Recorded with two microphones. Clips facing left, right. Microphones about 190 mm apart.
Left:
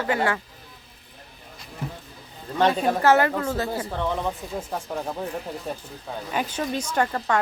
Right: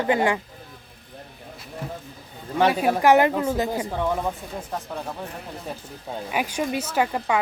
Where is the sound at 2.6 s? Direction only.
10° right (ahead or behind).